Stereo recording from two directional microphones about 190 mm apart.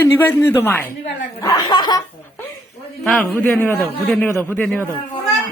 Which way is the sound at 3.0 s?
5° left (ahead or behind).